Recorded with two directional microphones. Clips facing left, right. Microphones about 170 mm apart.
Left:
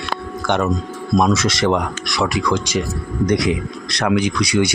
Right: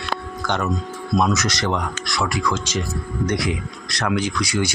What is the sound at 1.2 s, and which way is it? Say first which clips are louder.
Speech: left 5 dB; 25° left (ahead or behind).